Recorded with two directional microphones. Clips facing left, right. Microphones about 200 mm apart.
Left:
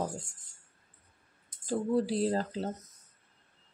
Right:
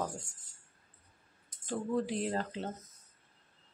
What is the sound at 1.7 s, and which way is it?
A woman's voice, 35° left (ahead or behind).